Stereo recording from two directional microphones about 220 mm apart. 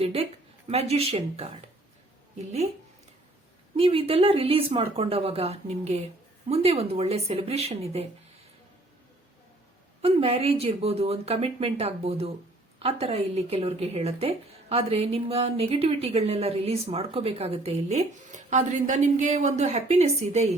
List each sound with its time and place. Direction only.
0.0 s speech: 25° right (ahead or behind)
3.8 s speech: 25° right (ahead or behind)
10.0 s speech: 25° right (ahead or behind)